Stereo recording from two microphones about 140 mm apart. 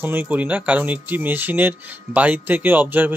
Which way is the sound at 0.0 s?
15° right (ahead or behind).